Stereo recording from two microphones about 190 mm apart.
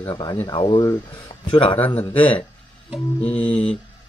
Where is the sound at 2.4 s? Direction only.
25° left (ahead or behind).